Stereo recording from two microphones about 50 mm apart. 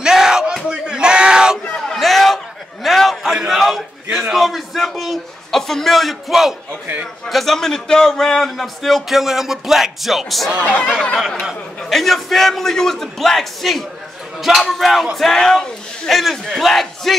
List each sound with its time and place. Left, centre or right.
0.0 s battle cry: centre
1.8 s a sound: centre
7.2 s a man's voice: centre
10.7 s speech: left
11.9 s a man's voice: centre